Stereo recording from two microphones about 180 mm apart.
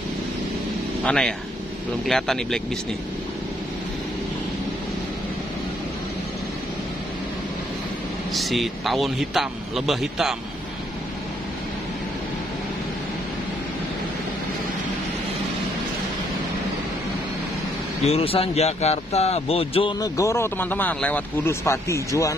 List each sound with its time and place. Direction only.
1.0 s speech: 5° left (ahead or behind)
8.3 s speech: centre (ahead or behind)
18.0 s speech: 35° left (ahead or behind)
20.0 s speech: 15° left (ahead or behind)